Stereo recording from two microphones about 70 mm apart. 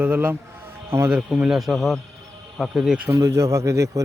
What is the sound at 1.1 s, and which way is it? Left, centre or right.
Speech, centre.